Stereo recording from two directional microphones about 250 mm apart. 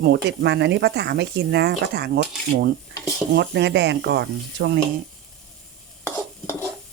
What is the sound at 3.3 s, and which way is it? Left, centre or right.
Speech, right.